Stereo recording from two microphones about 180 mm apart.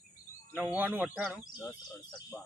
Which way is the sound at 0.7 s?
10° right (ahead or behind).